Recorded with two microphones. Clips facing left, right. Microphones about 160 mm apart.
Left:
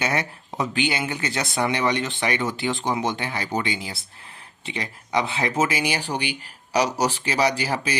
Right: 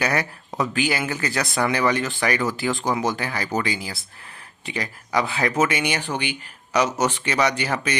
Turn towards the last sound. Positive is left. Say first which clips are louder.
# even
turn(degrees=30)  # may be behind; listen again after turning